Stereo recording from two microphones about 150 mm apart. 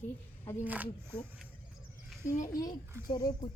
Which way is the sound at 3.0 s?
30° left (ahead or behind).